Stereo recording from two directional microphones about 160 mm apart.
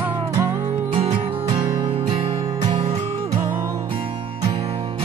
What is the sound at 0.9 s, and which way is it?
Music, 35° right (ahead or behind).